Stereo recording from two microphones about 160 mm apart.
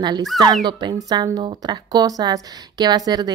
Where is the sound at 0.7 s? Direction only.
25° right (ahead or behind).